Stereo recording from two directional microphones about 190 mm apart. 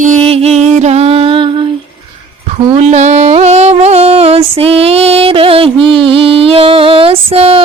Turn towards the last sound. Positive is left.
turn(degrees=-30)  # may be behind; listen again after turning